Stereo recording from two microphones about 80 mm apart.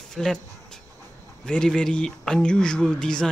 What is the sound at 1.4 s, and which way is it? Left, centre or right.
Speech, centre.